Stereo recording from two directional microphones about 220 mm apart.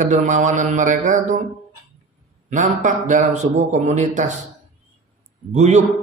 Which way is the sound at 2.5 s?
35° right (ahead or behind).